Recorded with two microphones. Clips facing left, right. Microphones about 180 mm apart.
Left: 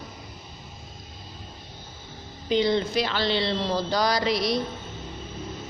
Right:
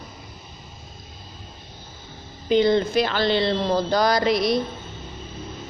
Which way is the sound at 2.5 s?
50° right (ahead or behind).